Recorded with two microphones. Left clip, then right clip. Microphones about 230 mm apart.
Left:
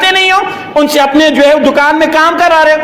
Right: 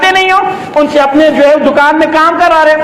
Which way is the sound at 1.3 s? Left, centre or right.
Left.